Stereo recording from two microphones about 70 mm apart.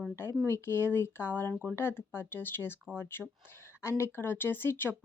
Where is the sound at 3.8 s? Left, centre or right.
Left.